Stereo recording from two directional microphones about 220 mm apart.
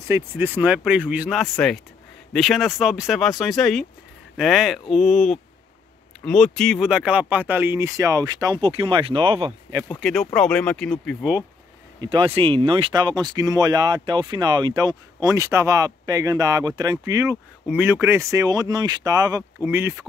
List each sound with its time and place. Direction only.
0.1 s speech: 10° right (ahead or behind)
9.8 s speech: centre (ahead or behind)
12.0 s speech: 20° right (ahead or behind)